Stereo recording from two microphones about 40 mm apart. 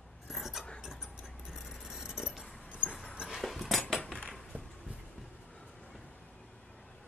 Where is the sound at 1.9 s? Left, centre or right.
Centre.